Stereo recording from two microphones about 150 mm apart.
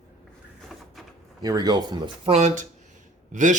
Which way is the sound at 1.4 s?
25° right (ahead or behind).